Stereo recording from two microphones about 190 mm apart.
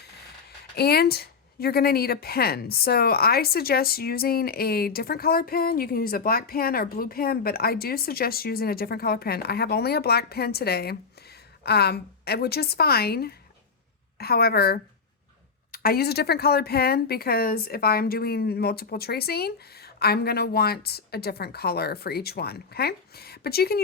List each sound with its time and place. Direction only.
0.8 s speech: 55° left (ahead or behind)